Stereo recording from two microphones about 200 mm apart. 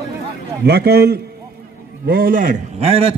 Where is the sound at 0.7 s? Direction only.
50° right (ahead or behind).